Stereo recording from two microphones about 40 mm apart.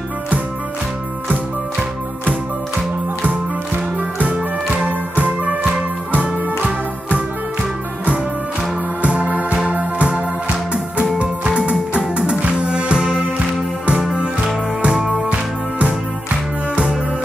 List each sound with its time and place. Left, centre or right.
4.8 s music: right
9.0 s music: right; by 13.2 s centre